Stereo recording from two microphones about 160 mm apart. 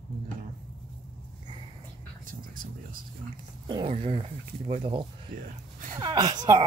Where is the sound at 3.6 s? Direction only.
30° right (ahead or behind).